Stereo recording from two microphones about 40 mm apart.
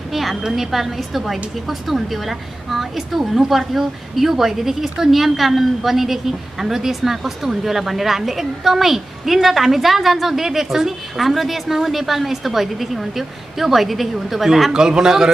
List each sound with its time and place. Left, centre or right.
0.1 s a woman's voice: centre
14.7 s a man's voice: centre